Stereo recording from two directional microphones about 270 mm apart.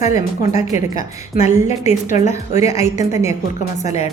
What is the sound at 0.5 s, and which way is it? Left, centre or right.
A woman's voice, left.